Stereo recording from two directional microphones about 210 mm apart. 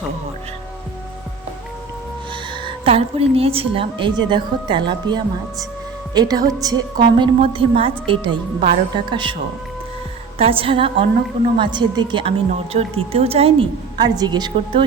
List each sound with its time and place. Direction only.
2.6 s a woman's voice: 25° right (ahead or behind)
10.3 s a woman's voice: 25° right (ahead or behind)